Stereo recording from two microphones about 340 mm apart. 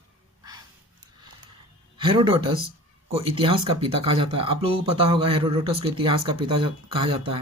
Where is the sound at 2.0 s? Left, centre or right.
Centre.